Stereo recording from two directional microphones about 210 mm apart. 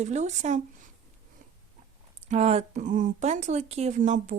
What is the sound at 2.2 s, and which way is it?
Speech, 30° right (ahead or behind).